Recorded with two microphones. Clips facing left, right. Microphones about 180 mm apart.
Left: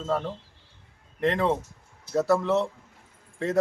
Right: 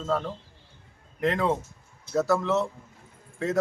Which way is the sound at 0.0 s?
5° left (ahead or behind).